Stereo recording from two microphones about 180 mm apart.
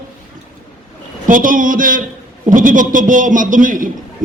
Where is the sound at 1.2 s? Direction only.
50° right (ahead or behind).